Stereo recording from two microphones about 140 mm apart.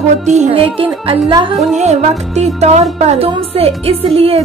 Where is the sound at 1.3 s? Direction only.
35° right (ahead or behind).